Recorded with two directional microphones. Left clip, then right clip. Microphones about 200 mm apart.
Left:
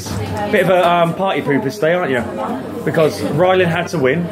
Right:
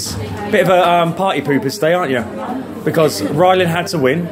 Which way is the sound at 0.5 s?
30° right (ahead or behind).